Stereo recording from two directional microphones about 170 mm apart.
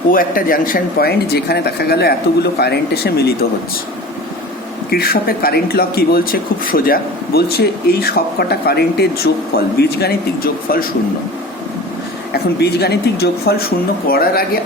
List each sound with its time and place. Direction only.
0.1 s speech: 55° left (ahead or behind)
4.9 s speech: 65° left (ahead or behind)
12.3 s speech: 70° left (ahead or behind)